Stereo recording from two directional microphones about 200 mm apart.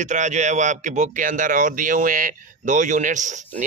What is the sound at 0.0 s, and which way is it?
Speech, 35° right (ahead or behind).